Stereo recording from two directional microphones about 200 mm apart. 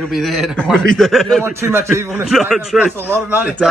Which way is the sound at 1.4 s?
10° right (ahead or behind).